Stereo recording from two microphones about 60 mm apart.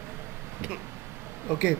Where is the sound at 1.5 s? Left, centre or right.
Right.